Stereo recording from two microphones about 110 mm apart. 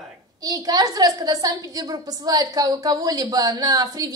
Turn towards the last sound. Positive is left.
turn(degrees=-35)  # may be behind; listen again after turning